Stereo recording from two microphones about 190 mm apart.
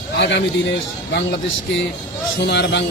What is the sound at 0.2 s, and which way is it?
Speech, 60° left (ahead or behind).